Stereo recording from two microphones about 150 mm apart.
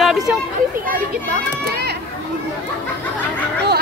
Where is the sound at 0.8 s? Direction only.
80° right.